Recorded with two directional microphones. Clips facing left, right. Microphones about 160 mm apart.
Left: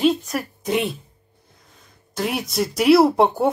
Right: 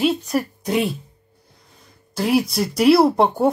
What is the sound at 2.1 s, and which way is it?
Speech, centre (ahead or behind).